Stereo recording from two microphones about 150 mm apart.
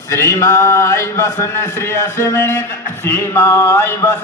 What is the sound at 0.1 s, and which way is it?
Mantra, 20° left (ahead or behind).